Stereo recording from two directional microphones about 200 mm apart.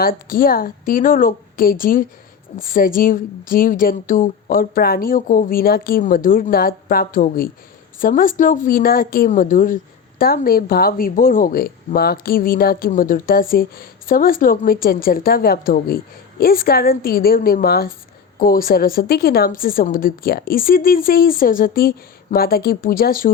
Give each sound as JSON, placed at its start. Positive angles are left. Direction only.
{"t": 0.0, "sound": "speech", "side_deg": 45}